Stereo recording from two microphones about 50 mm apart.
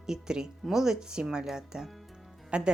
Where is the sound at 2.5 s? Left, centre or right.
Right.